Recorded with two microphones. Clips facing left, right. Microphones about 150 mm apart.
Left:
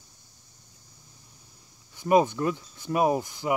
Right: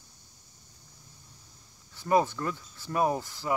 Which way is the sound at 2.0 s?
15° left (ahead or behind).